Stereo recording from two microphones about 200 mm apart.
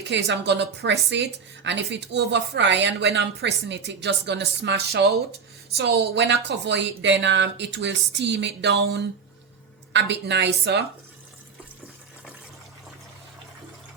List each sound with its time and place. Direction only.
0.3 s a woman's voice: 60° right (ahead or behind)